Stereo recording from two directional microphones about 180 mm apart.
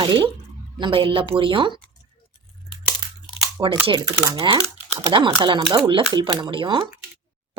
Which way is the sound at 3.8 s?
20° right (ahead or behind).